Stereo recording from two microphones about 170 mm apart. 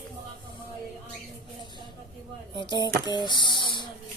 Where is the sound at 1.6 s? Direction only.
25° left (ahead or behind).